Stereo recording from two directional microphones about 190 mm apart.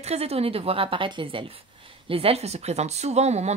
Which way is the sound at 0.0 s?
35° right (ahead or behind).